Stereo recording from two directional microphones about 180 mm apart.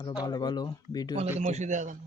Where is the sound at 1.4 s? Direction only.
40° right (ahead or behind).